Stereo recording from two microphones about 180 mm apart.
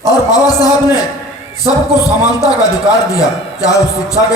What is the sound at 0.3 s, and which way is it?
A man's voice, 20° left (ahead or behind).